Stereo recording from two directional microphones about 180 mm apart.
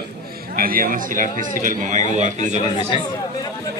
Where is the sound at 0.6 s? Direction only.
50° right (ahead or behind).